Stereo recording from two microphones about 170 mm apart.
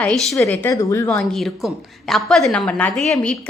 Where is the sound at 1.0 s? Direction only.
5° left (ahead or behind).